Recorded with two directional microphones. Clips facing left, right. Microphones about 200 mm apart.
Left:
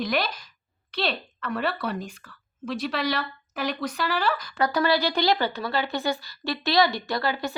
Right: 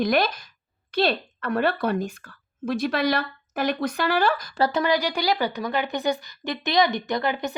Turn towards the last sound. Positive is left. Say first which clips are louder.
# right 2 dB
turn(degrees=-20)  # may be behind; listen again after turning